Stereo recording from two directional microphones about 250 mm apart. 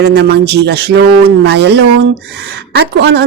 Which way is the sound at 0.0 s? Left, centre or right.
Right.